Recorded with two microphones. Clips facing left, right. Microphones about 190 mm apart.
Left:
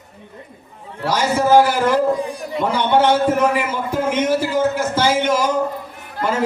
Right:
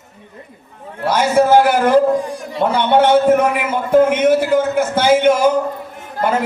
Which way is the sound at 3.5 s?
60° right (ahead or behind).